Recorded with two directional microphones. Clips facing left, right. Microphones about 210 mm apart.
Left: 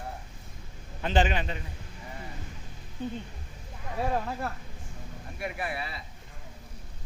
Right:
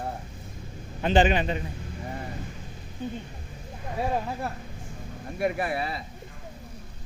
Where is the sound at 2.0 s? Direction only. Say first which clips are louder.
Right 7 dB; 50° right (ahead or behind).